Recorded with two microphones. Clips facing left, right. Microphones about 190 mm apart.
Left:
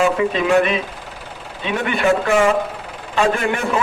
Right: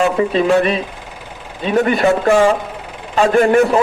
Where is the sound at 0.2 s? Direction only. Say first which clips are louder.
Right 3 dB; 35° right (ahead or behind).